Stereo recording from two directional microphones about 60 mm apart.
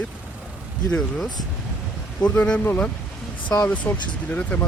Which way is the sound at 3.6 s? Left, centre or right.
Left.